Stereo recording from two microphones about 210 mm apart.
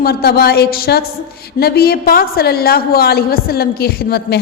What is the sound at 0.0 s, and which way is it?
A woman's voice, 45° left (ahead or behind).